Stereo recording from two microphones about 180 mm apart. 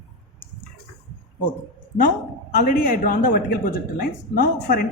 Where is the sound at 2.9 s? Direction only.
50° left (ahead or behind).